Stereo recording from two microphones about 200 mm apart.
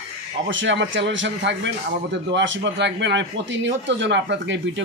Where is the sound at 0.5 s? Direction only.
70° right (ahead or behind).